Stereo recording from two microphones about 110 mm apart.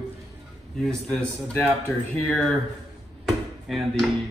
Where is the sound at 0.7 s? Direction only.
5° left (ahead or behind).